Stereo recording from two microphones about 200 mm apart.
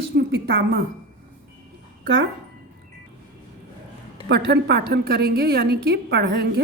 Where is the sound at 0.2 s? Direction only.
60° right (ahead or behind).